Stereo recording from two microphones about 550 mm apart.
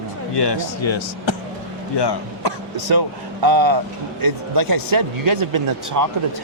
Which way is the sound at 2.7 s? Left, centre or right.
Right.